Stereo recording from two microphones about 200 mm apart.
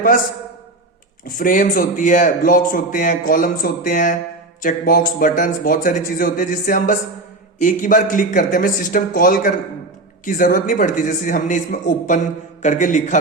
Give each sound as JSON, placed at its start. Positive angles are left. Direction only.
{"t": 1.4, "sound": "a man's voice", "side_deg": 40}